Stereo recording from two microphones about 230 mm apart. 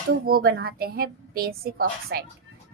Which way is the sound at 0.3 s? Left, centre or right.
Right.